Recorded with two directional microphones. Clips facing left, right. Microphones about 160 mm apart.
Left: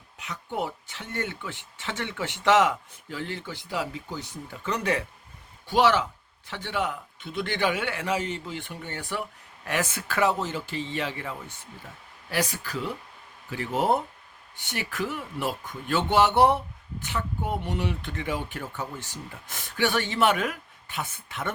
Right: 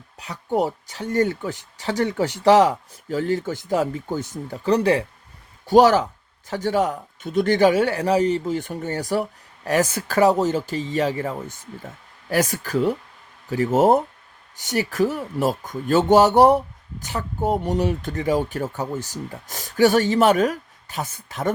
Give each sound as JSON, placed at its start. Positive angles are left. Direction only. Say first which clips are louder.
{"t": 0.2, "sound": "speech", "louder": "right 9 dB", "side_deg": -35}